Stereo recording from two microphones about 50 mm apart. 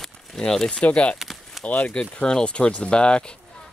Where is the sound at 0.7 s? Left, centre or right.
Left.